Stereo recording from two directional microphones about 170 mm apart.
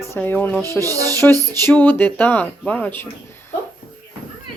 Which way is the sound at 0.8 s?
20° right (ahead or behind).